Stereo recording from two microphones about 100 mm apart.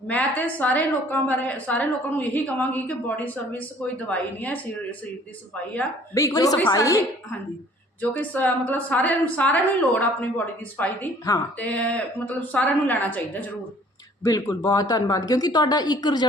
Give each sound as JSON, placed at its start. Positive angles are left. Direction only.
{"t": 0.1, "sound": "a woman's voice", "side_deg": 15}
{"t": 6.3, "sound": "speech", "side_deg": 40}
{"t": 8.1, "sound": "a woman's voice", "side_deg": 15}
{"t": 14.3, "sound": "speech", "side_deg": 35}